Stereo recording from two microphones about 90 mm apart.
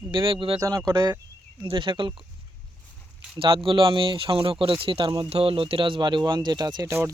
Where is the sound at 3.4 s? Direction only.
75° right (ahead or behind); by 6.9 s 55° right (ahead or behind).